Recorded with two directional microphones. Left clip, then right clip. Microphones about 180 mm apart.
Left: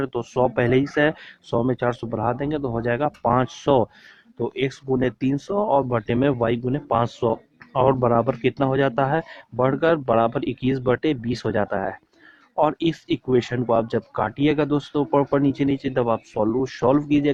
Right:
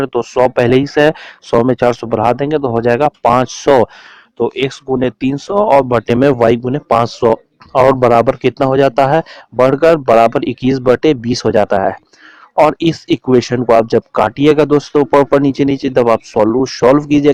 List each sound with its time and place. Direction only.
0.0 s speech: 35° right (ahead or behind)